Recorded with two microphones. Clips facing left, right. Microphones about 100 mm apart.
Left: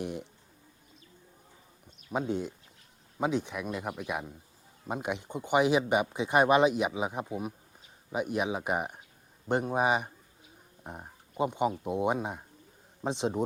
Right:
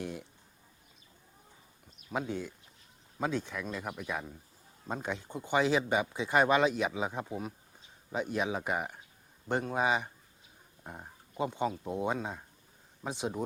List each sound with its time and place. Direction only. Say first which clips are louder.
0.0 s speech: left 3 dB; 20° left (ahead or behind)
2.1 s speech: left 4 dB; 20° left (ahead or behind)